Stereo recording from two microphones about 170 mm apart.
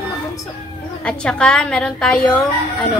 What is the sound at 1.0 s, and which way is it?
A woman's voice, 5° left (ahead or behind).